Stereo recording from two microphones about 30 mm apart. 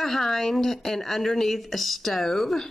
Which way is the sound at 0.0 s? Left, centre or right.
Centre.